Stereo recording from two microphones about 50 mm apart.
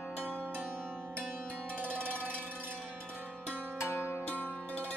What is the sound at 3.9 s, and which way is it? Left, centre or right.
Music, left.